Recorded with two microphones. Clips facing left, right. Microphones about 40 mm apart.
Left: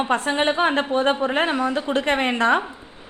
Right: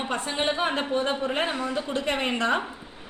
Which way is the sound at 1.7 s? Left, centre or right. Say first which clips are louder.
Left 6 dB; left.